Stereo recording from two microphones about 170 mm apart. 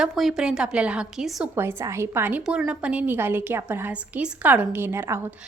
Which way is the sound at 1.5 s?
15° right (ahead or behind).